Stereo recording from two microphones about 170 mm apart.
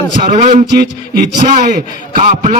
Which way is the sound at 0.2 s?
40° right (ahead or behind).